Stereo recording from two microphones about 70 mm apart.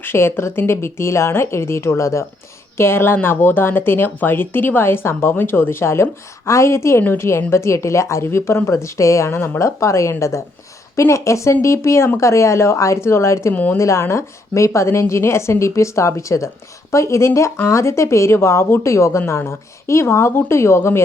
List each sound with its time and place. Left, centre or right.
0.0 s a woman's voice: left
13.5 s speech: left
13.7 s a woman's voice: left